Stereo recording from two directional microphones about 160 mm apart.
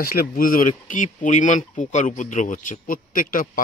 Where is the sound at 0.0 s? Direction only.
65° left (ahead or behind).